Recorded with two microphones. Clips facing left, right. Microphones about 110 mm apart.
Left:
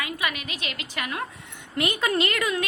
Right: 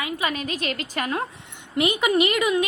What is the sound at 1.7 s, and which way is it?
Speech, 20° right (ahead or behind).